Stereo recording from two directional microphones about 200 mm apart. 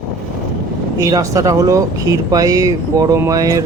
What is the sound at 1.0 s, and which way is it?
Speech, 15° right (ahead or behind).